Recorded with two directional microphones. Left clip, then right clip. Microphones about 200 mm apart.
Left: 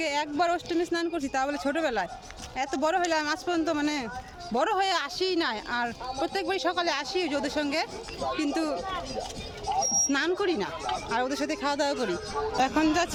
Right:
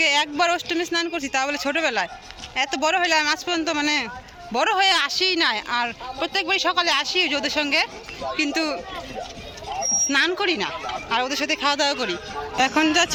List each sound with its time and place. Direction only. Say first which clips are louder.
0.0 s speech: right 7 dB; centre (ahead or behind)
10.1 s speech: right 6 dB; centre (ahead or behind)
12.1 s speech: right 1 dB; 50° left (ahead or behind)
12.5 s speech: right 6 dB; centre (ahead or behind)